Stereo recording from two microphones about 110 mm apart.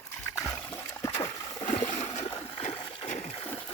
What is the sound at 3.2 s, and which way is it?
Splash, 75° left (ahead or behind).